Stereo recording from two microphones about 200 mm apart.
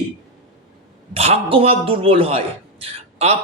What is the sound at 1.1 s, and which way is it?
A man's voice, 30° right (ahead or behind).